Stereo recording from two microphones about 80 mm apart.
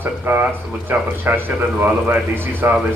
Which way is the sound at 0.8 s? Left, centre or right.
Right.